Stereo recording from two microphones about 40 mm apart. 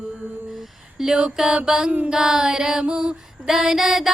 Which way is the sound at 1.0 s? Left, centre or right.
Centre.